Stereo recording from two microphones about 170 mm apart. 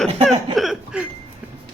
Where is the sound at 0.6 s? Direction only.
5° right (ahead or behind).